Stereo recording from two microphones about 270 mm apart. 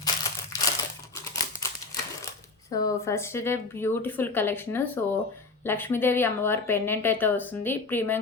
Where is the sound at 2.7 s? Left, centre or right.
Centre.